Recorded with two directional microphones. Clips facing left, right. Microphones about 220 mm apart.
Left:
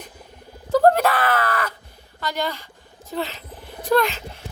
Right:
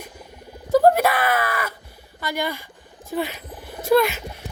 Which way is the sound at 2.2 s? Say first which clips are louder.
Even; 10° right (ahead or behind).